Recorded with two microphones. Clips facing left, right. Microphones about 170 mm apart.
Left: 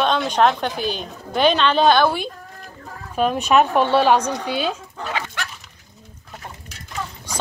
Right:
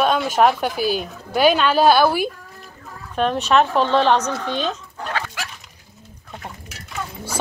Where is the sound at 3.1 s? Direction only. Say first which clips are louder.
Left 1 dB; 10° left (ahead or behind).